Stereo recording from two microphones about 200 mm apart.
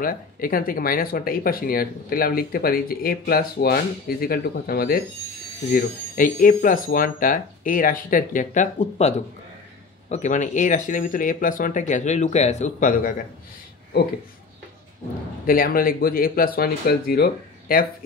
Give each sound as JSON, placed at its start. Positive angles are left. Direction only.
{"t": 0.0, "sound": "speech", "side_deg": 45}
{"t": 15.4, "sound": "speech", "side_deg": 45}